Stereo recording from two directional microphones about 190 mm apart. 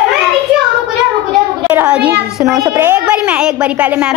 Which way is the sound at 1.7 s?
10° right (ahead or behind).